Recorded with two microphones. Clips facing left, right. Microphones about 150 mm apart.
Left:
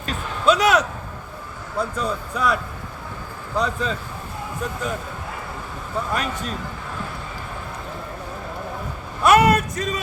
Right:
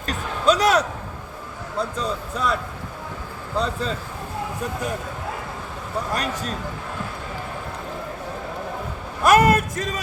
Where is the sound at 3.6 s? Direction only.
30° right (ahead or behind).